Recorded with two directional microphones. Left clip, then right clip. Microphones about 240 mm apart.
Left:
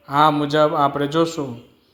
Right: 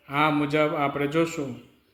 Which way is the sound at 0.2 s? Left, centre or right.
Centre.